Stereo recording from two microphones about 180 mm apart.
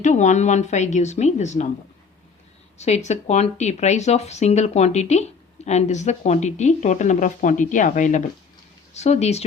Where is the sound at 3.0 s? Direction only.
35° left (ahead or behind).